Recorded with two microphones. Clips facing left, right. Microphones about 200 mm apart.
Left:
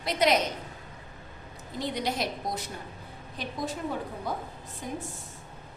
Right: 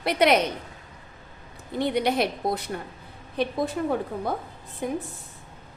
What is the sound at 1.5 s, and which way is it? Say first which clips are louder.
A woman's voice: right 8 dB; 60° right (ahead or behind).